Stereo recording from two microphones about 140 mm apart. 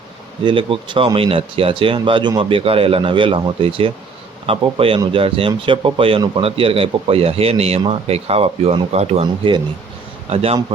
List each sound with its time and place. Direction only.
0.4 s a man's voice: 35° right (ahead or behind)